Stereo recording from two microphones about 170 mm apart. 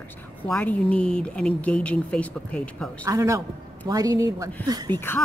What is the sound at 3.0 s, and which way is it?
A woman's voice, 20° right (ahead or behind).